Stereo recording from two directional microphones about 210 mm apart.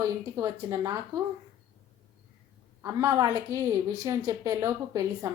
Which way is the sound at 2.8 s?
15° right (ahead or behind).